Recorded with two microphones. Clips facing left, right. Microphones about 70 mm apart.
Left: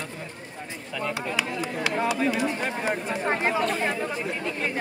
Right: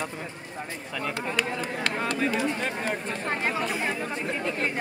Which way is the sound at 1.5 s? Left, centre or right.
Centre.